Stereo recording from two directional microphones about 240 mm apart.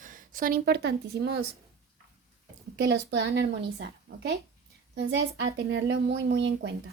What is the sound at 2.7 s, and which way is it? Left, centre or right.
A woman's voice, right.